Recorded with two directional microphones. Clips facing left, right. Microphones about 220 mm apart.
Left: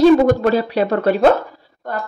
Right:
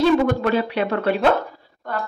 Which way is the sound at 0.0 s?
40° left (ahead or behind).